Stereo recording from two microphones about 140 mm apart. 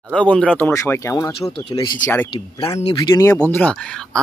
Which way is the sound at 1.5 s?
35° left (ahead or behind).